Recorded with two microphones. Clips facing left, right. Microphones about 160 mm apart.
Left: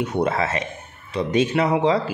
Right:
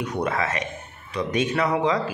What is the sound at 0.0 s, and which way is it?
Speech, 25° left (ahead or behind).